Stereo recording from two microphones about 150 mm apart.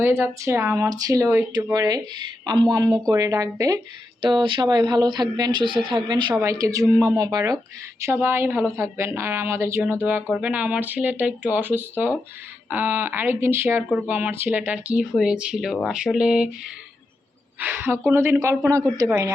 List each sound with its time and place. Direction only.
0.0 s speech: 15° right (ahead or behind)
6.3 s speech: 20° right (ahead or behind)